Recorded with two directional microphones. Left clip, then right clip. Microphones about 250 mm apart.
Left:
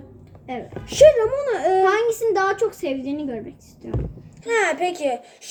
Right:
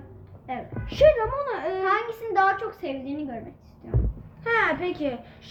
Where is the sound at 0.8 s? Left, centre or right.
Centre.